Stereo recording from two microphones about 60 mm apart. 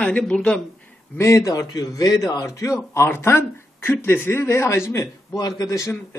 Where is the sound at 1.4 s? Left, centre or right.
Left.